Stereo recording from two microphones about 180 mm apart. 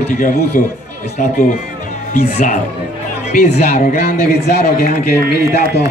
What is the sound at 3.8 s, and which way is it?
A man's voice, 60° left (ahead or behind).